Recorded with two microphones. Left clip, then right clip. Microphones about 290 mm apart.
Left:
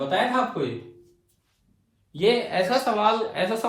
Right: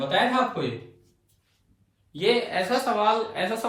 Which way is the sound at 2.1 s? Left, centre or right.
Left.